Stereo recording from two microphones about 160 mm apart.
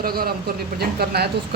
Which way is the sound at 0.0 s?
70° right (ahead or behind).